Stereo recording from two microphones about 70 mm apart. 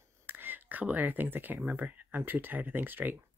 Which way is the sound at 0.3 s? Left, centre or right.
Right.